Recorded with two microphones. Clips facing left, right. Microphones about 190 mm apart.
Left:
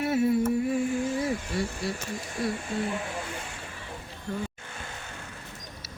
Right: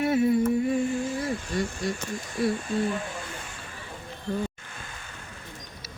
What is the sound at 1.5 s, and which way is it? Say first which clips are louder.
Speech: right 5 dB; 5° left (ahead or behind).